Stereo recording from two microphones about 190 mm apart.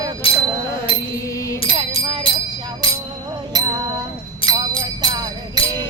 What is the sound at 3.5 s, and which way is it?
Music, 20° right (ahead or behind).